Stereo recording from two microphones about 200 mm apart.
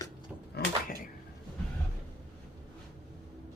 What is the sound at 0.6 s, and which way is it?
Door, 55° left (ahead or behind).